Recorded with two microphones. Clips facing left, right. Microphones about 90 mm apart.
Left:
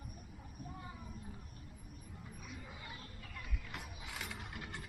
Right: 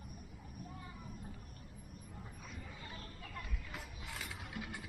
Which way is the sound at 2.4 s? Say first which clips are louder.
Left 3 dB; 5° left (ahead or behind).